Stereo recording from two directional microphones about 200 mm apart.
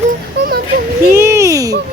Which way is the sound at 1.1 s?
15° right (ahead or behind).